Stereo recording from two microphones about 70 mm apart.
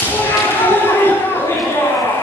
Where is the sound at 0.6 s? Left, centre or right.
Left.